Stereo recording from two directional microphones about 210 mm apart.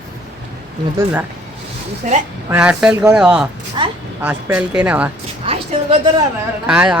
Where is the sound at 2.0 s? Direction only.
40° right (ahead or behind).